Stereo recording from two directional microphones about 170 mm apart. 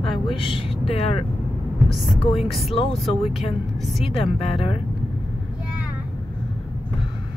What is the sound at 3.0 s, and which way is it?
Speech, centre (ahead or behind).